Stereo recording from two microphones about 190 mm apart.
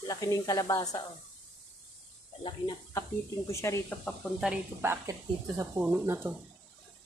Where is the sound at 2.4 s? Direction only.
25° left (ahead or behind).